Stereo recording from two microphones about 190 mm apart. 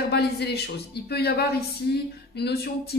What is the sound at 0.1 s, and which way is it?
Speech, 60° left (ahead or behind).